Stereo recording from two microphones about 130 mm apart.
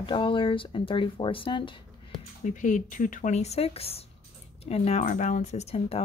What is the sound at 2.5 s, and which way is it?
Speech, 80° left.